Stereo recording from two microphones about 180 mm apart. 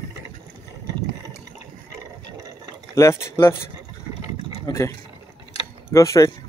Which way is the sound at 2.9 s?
15° left (ahead or behind).